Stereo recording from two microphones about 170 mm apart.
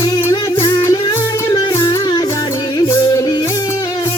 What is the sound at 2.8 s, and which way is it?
Yodeling, 20° left (ahead or behind).